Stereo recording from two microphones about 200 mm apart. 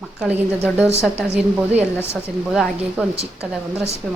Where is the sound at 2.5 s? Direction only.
Centre (ahead or behind).